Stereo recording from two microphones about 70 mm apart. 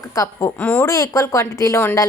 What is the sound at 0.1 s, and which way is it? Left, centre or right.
A woman's voice, left.